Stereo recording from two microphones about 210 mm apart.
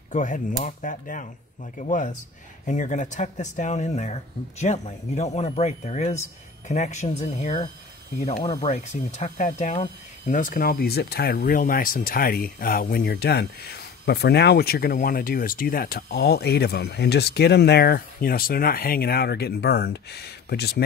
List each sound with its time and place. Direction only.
0.1 s speech: 35° left (ahead or behind)